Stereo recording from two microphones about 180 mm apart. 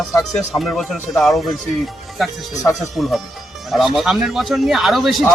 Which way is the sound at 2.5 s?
20° left (ahead or behind).